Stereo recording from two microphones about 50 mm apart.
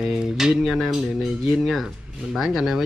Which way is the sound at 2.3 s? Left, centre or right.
Centre.